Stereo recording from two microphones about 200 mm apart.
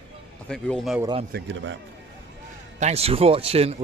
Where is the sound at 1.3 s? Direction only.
65° right (ahead or behind).